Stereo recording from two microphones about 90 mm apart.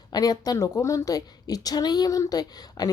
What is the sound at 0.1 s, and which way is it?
A woman's voice, 45° left (ahead or behind).